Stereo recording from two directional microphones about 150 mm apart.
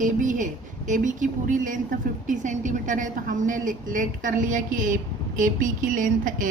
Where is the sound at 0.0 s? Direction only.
60° right (ahead or behind).